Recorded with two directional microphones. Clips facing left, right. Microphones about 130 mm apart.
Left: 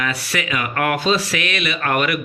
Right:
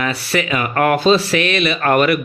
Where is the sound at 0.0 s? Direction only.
30° right (ahead or behind).